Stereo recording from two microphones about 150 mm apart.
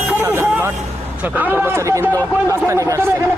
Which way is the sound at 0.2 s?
15° right (ahead or behind).